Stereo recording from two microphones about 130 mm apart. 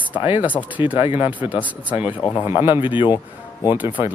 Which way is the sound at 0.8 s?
40° left (ahead or behind).